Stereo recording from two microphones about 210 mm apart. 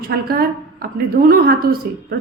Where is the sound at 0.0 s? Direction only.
45° right (ahead or behind).